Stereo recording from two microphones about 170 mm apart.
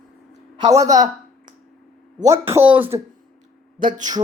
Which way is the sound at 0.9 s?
45° right (ahead or behind).